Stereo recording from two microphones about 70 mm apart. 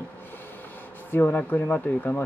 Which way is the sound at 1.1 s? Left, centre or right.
Left.